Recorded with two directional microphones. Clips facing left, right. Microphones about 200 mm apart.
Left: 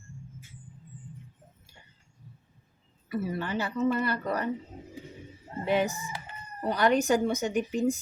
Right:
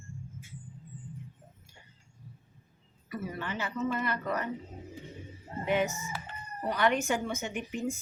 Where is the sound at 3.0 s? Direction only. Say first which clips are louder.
Left 5 dB; 30° left (ahead or behind).